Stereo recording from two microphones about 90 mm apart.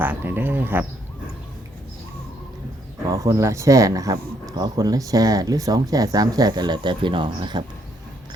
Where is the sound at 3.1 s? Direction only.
35° right (ahead or behind).